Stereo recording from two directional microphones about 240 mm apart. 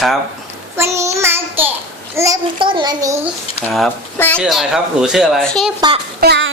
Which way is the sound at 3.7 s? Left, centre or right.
Centre.